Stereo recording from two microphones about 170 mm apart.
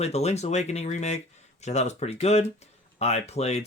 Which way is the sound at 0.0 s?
40° left (ahead or behind).